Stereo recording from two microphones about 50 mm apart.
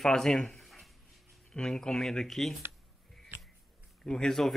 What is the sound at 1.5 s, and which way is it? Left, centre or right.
A man's voice, centre.